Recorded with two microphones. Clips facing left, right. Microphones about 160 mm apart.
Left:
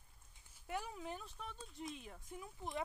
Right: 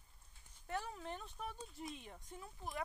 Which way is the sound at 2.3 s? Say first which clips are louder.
Left 2 dB; 15° left (ahead or behind).